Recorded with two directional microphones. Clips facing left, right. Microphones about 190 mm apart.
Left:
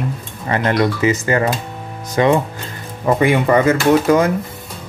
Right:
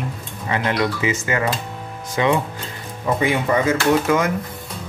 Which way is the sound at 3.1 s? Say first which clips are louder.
Left 5 dB; 60° left (ahead or behind).